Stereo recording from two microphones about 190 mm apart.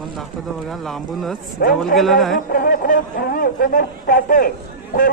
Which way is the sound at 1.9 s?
Centre (ahead or behind).